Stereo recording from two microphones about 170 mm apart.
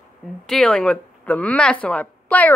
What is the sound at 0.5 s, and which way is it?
Speech, 5° left (ahead or behind).